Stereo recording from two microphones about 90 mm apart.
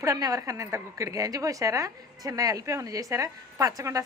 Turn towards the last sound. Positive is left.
turn(degrees=-40)  # may be behind; listen again after turning